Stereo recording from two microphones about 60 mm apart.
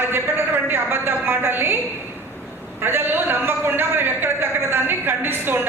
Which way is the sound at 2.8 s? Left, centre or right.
Right.